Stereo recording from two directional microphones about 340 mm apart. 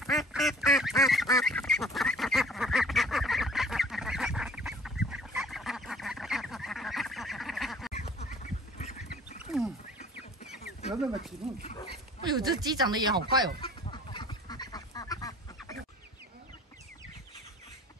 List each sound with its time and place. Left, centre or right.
0.0 s duck: centre
7.9 s duck: centre
10.9 s snake: centre
12.2 s speech: centre
13.6 s duck: centre